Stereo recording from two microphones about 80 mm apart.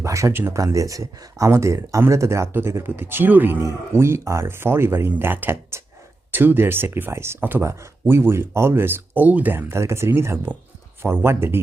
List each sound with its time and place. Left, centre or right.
0.0 s a sound: right
0.3 s speech: right
7.6 s speech: right